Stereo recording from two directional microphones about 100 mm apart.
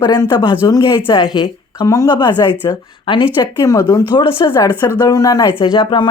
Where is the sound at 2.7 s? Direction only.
35° left (ahead or behind).